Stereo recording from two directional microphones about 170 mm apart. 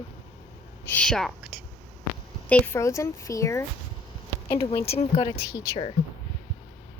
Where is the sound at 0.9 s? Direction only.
5° left (ahead or behind).